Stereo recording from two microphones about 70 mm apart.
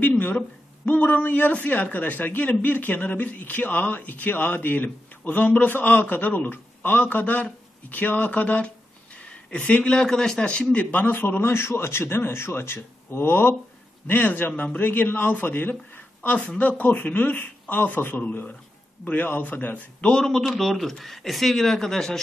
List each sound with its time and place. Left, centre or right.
0.0 s a sound: left
0.8 s speech: left
20.2 s speech: centre